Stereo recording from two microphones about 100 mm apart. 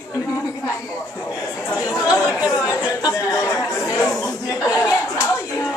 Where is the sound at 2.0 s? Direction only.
35° left (ahead or behind).